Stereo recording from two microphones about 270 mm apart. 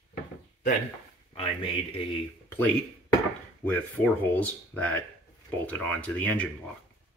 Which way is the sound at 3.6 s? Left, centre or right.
Centre.